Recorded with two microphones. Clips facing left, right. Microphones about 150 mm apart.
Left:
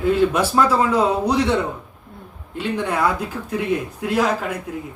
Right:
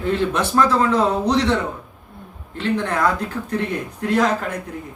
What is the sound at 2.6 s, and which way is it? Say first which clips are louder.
Speech: right 1 dB; 10° left (ahead or behind).